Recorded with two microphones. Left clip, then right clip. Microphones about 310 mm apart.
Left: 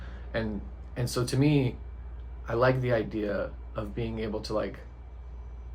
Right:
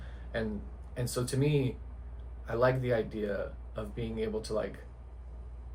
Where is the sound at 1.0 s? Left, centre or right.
Left.